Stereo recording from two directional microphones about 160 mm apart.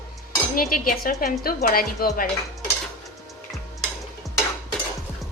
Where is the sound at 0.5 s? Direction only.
60° left (ahead or behind).